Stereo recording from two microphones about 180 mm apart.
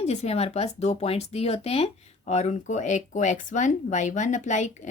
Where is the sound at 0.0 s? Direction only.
35° left (ahead or behind).